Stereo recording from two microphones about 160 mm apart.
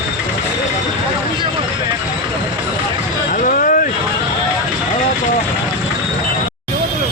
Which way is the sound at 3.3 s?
55° left (ahead or behind).